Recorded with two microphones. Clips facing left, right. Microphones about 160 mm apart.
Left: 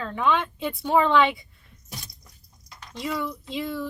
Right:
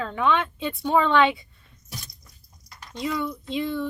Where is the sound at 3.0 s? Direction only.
Centre (ahead or behind).